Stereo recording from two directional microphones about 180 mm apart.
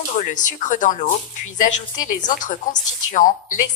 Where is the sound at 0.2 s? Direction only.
45° left (ahead or behind).